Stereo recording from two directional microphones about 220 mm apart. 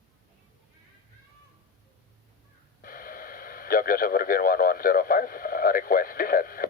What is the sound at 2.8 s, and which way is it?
Speech, 40° left (ahead or behind).